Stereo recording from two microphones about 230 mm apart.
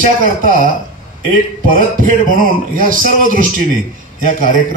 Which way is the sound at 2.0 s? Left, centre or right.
Right.